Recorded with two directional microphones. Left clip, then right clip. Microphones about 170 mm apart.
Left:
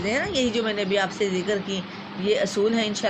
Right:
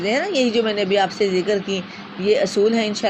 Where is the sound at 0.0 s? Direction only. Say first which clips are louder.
Right 5 dB; 20° right (ahead or behind).